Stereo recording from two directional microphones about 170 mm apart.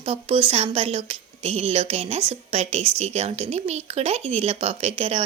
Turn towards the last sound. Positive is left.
turn(degrees=-35)  # may be behind; listen again after turning